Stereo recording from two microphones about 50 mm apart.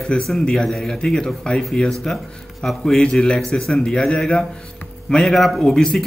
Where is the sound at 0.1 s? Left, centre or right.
Centre.